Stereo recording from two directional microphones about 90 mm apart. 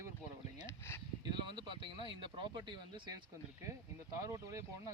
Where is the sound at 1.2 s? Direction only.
60° right (ahead or behind).